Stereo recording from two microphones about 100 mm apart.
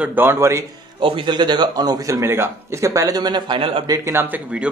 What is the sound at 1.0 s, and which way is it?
A man's voice, 60° right (ahead or behind).